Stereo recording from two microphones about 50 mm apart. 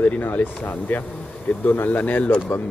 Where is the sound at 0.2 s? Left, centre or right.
Left.